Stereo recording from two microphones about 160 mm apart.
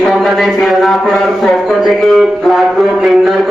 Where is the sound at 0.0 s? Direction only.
Centre (ahead or behind).